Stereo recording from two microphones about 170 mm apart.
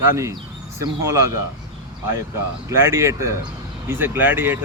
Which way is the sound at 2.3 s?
15° right (ahead or behind).